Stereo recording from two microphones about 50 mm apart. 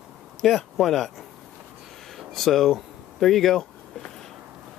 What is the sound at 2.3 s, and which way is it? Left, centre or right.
Speech, centre.